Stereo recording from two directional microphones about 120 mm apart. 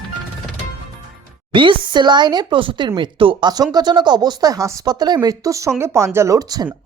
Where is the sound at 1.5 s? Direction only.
45° right (ahead or behind).